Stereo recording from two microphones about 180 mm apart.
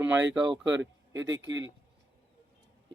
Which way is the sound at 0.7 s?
85° right.